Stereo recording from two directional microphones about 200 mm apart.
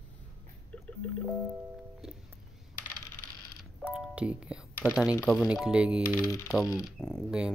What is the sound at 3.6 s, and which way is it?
Music, 5° right (ahead or behind).